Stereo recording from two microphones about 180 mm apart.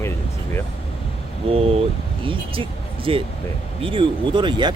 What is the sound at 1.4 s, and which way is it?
Speech, 35° right (ahead or behind).